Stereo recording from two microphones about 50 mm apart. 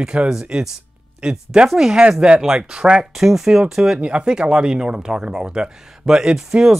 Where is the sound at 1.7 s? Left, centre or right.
Centre.